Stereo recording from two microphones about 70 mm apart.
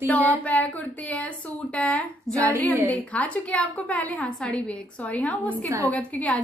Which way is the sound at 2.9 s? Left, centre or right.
Left.